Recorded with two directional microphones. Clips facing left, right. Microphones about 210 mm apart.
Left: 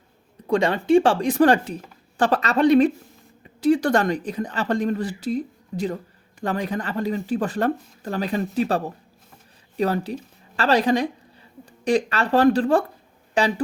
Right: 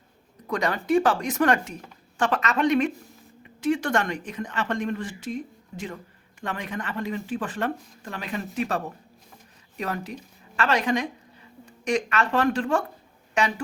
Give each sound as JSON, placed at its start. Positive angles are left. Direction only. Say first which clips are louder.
{"t": 0.4, "sound": "a woman's voice", "louder": "left 6 dB", "side_deg": 30}